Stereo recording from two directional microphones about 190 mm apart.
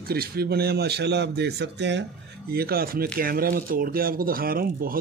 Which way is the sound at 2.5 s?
55° right (ahead or behind).